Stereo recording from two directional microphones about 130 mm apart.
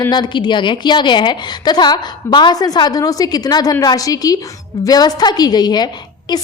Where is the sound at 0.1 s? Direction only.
35° left (ahead or behind).